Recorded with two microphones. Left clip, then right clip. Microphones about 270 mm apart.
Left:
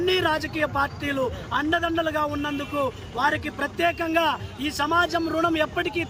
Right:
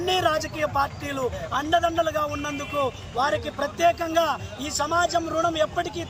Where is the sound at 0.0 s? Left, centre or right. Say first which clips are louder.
Even; centre.